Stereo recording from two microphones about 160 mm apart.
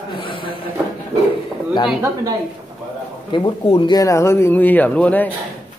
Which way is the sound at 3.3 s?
30° left (ahead or behind).